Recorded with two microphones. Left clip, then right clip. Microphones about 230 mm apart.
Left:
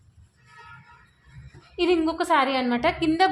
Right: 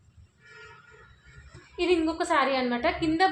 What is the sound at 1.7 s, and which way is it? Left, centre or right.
A woman's voice, left.